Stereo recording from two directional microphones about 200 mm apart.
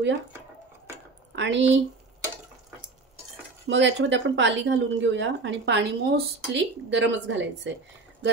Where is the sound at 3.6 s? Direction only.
65° right (ahead or behind).